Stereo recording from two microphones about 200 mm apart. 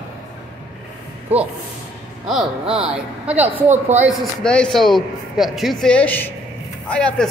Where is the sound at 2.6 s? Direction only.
30° right (ahead or behind).